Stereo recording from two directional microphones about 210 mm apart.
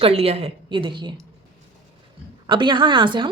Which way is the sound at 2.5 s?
25° right (ahead or behind).